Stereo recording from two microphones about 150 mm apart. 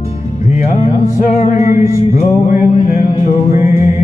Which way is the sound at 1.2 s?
50° left (ahead or behind).